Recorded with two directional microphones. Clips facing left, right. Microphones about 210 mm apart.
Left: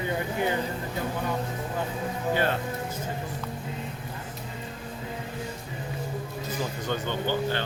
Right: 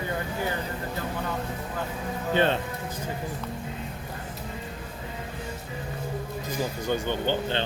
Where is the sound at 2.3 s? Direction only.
25° right (ahead or behind).